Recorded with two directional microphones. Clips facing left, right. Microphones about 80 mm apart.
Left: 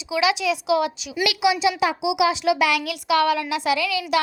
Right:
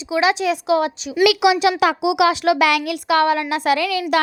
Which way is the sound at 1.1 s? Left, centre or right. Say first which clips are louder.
Right 7 dB; right.